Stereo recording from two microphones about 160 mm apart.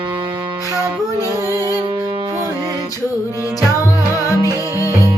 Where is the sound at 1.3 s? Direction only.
20° right (ahead or behind).